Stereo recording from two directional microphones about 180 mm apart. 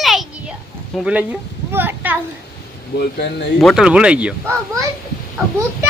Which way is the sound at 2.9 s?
70° left (ahead or behind).